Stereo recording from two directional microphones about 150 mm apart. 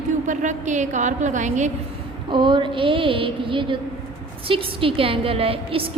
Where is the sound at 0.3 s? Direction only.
55° right (ahead or behind).